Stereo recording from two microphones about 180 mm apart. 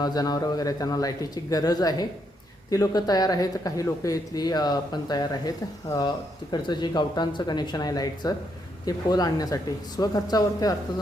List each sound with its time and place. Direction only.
0.0 s speech: 20° left (ahead or behind)